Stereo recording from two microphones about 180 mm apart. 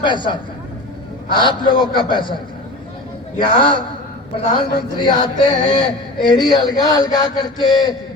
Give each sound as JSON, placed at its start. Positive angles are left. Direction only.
{"t": 0.0, "sound": "speech", "side_deg": 25}
{"t": 3.4, "sound": "speech", "side_deg": 25}